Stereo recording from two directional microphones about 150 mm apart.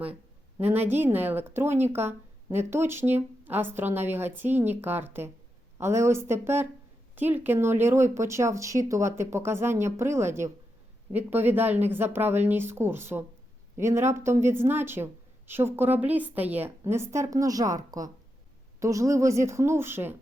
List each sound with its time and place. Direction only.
0.6 s a woman's voice: 15° right (ahead or behind)